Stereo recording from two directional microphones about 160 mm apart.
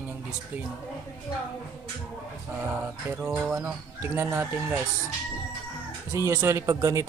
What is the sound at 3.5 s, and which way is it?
Speech, 15° right (ahead or behind).